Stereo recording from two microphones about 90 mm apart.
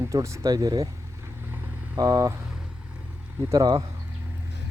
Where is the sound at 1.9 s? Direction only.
40° right (ahead or behind).